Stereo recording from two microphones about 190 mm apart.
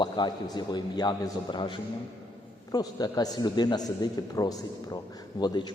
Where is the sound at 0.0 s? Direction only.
20° left (ahead or behind).